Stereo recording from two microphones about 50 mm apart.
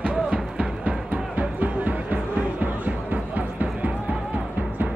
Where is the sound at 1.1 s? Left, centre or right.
Right.